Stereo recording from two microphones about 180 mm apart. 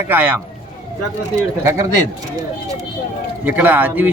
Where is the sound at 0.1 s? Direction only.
10° right (ahead or behind).